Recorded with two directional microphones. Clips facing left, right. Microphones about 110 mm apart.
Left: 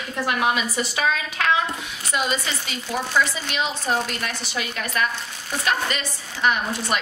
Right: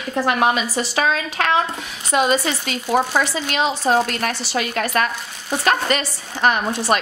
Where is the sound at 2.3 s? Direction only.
55° right (ahead or behind).